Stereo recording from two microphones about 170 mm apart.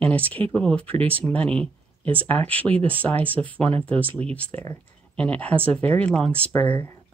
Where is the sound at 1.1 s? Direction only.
10° left (ahead or behind).